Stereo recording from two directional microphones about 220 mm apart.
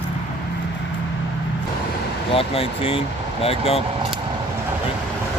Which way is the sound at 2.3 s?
25° left (ahead or behind).